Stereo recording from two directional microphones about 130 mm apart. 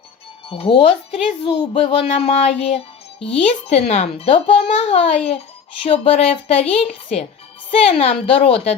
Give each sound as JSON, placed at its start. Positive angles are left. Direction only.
{"t": 0.4, "sound": "speech", "side_deg": 45}
{"t": 2.0, "sound": "music", "side_deg": 60}
{"t": 3.3, "sound": "speech", "side_deg": 55}